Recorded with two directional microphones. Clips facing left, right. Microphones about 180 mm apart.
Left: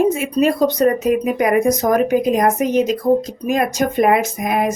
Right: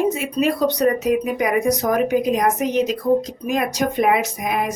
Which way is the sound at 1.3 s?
45° left (ahead or behind).